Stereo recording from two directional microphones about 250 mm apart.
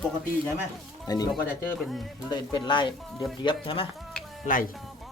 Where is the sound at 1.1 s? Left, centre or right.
Centre.